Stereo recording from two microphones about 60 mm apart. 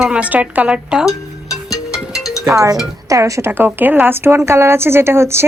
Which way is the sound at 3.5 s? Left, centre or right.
Right.